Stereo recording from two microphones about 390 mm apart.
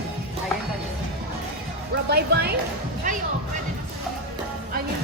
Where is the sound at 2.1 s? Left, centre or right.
Right.